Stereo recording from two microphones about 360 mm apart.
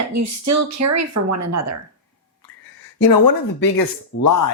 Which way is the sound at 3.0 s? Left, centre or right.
Left.